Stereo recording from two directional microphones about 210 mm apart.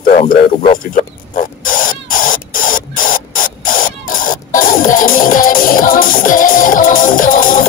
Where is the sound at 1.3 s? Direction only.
40° left (ahead or behind).